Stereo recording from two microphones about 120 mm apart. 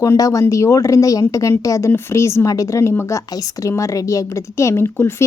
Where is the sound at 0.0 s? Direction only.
30° left (ahead or behind).